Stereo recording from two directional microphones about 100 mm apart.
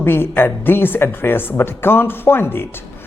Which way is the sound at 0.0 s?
20° left (ahead or behind).